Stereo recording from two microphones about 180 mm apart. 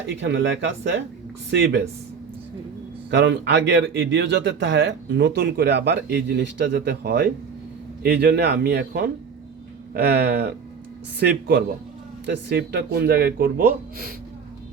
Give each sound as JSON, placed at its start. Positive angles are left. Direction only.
{"t": 0.0, "sound": "speech", "side_deg": -80}
{"t": 3.1, "sound": "speech", "side_deg": -75}